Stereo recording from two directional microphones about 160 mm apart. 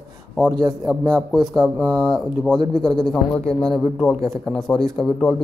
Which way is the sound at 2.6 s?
25° right (ahead or behind).